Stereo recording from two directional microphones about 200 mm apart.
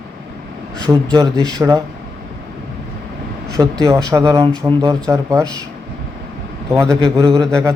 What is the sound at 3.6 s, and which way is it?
Speech, 15° right (ahead or behind).